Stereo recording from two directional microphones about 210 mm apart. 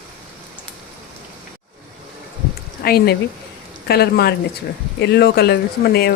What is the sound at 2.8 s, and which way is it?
Speech, 50° left (ahead or behind).